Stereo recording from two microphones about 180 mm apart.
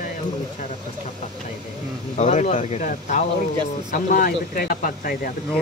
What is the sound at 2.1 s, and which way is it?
Speech, 40° left (ahead or behind).